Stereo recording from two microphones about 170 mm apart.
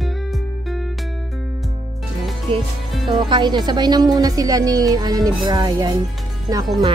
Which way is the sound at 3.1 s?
25° right (ahead or behind).